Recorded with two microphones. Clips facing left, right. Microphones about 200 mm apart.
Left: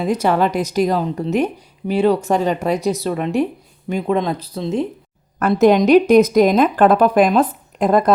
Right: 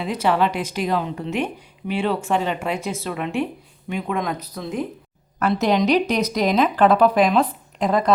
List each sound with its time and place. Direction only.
0.0 s speech: 45° left (ahead or behind); by 4.9 s 25° left (ahead or behind)
5.4 s speech: 50° left (ahead or behind)